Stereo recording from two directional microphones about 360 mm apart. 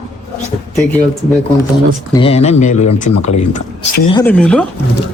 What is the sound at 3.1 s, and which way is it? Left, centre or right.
Speech, left.